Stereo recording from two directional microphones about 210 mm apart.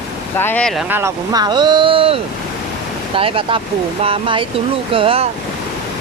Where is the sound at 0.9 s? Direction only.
15° right (ahead or behind).